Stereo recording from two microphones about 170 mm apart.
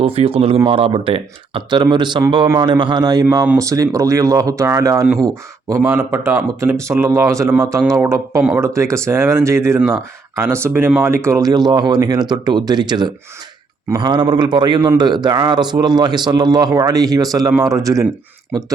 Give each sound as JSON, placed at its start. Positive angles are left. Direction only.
{"t": 0.0, "sound": "a man's voice", "side_deg": -35}
{"t": 8.4, "sound": "speech", "side_deg": -5}
{"t": 8.6, "sound": "a man's voice", "side_deg": -15}